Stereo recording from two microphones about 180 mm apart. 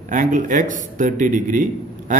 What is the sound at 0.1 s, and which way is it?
A man's voice, 45° right (ahead or behind).